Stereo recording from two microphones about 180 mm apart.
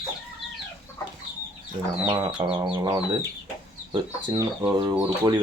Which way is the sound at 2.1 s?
20° right (ahead or behind).